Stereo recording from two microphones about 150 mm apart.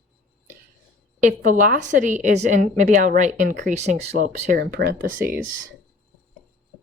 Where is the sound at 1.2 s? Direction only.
60° right (ahead or behind); by 5.3 s 85° right.